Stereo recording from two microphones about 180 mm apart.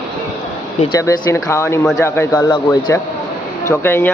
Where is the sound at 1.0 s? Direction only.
15° left (ahead or behind).